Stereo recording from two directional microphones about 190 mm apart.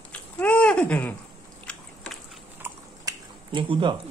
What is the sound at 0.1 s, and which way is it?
Babbling, 5° left (ahead or behind).